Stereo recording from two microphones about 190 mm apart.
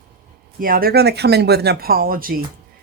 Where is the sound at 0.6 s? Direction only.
50° right (ahead or behind).